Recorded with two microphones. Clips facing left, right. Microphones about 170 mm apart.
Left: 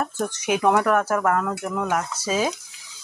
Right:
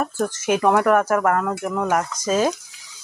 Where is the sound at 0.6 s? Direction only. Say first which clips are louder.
Right 2 dB; centre (ahead or behind).